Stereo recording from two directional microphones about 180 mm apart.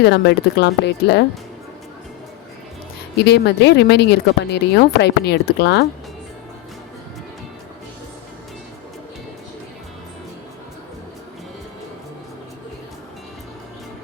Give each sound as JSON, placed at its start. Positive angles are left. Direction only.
{"t": 0.0, "sound": "a woman's voice", "side_deg": 70}
{"t": 3.2, "sound": "a woman's voice", "side_deg": 70}